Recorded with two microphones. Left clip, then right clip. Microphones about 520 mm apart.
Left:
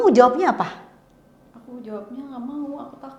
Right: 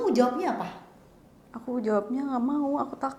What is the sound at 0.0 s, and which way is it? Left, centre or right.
Speech, left.